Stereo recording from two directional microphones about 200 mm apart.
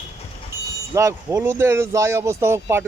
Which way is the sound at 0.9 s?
15° right (ahead or behind).